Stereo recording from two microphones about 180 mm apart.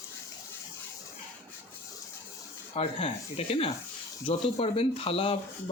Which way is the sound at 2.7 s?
35° left (ahead or behind).